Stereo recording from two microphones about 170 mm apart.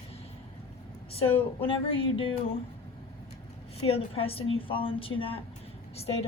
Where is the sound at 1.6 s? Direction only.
30° left (ahead or behind).